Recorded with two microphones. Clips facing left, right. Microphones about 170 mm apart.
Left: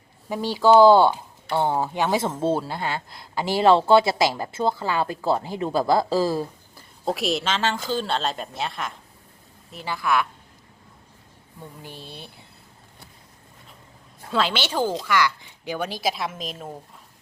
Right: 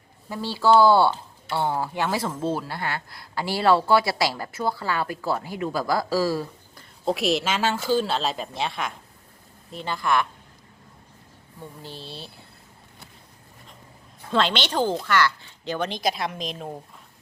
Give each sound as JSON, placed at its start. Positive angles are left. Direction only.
{"t": 0.3, "sound": "speech", "side_deg": 15}
{"t": 7.0, "sound": "a woman's voice", "side_deg": 0}
{"t": 11.8, "sound": "a woman's voice", "side_deg": 15}
{"t": 14.3, "sound": "a woman's voice", "side_deg": 5}